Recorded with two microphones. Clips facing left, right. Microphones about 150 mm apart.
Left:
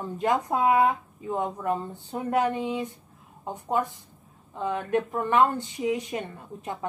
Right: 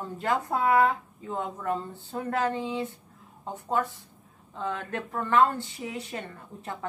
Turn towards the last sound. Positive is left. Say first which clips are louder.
# left 3 dB
turn(degrees=15)  # may be behind; listen again after turning